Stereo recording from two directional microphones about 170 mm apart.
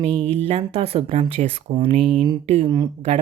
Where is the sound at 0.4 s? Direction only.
35° right (ahead or behind).